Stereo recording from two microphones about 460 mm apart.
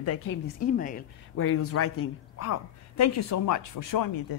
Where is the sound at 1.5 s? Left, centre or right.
Left.